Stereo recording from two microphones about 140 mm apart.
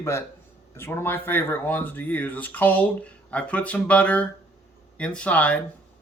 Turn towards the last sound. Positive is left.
turn(degrees=10)  # may be behind; listen again after turning